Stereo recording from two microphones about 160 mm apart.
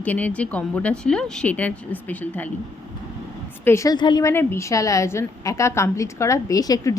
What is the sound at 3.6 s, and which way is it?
A woman's voice, 15° left (ahead or behind).